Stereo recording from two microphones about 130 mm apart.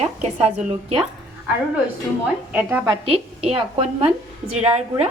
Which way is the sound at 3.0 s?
50° right (ahead or behind).